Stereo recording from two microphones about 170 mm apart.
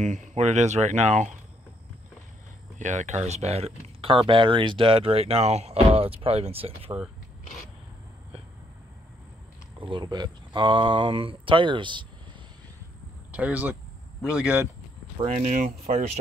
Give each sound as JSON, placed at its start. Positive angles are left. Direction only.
{"t": 0.0, "sound": "speech", "side_deg": -45}
{"t": 2.8, "sound": "speech", "side_deg": -45}
{"t": 9.8, "sound": "speech", "side_deg": -30}
{"t": 13.3, "sound": "speech", "side_deg": -10}
{"t": 15.2, "sound": "speech", "side_deg": -45}